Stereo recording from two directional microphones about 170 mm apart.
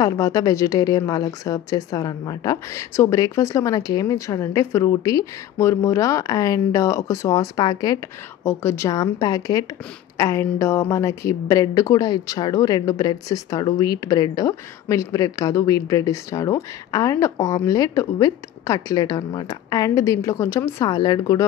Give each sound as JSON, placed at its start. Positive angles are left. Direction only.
{"t": 0.0, "sound": "a woman's voice", "side_deg": 20}